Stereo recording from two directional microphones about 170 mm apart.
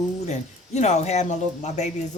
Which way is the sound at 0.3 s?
40° left (ahead or behind).